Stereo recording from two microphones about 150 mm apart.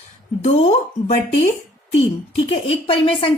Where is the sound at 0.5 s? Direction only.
45° left (ahead or behind).